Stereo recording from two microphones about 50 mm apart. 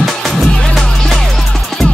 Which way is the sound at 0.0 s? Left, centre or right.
Centre.